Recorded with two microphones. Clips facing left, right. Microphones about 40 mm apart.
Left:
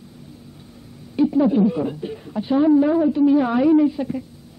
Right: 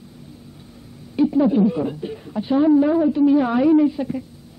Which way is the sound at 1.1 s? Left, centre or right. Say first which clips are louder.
Even; centre.